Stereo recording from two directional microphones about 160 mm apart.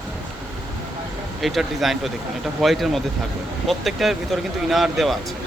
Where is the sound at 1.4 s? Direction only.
Centre (ahead or behind).